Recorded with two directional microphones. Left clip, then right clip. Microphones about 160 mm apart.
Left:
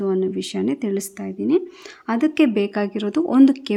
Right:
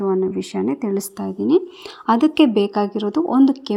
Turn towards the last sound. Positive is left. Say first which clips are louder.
# left 1 dB
turn(degrees=10)  # may be behind; listen again after turning